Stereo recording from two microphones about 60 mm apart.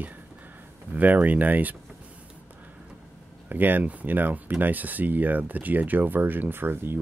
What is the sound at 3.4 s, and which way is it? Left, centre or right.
Speech, right.